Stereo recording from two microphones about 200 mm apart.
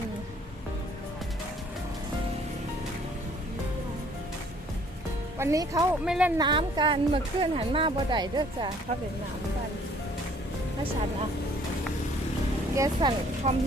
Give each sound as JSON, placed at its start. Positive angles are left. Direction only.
{"t": 5.4, "sound": "speech", "side_deg": -15}
{"t": 6.4, "sound": "a woman's voice", "side_deg": -25}
{"t": 12.7, "sound": "speech", "side_deg": -20}